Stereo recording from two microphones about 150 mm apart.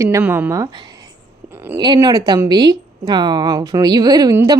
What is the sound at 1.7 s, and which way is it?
Speech, 30° right (ahead or behind).